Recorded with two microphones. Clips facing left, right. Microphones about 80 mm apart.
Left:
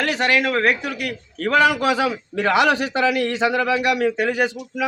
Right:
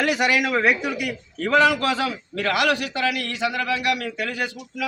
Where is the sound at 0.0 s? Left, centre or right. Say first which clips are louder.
Left 1 dB; centre.